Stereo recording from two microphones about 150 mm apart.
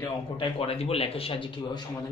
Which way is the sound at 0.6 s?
40° left (ahead or behind).